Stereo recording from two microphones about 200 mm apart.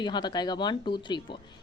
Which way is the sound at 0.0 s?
20° left (ahead or behind).